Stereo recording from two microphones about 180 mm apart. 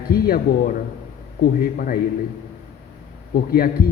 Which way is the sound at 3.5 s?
55° left (ahead or behind).